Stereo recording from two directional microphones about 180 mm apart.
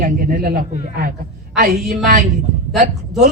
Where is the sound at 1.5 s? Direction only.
55° right (ahead or behind).